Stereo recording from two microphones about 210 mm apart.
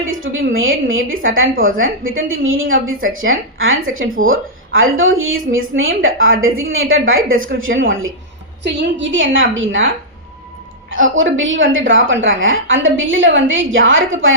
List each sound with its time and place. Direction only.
0.0 s a woman's voice: 70° right (ahead or behind)
10.9 s a woman's voice: 65° right (ahead or behind)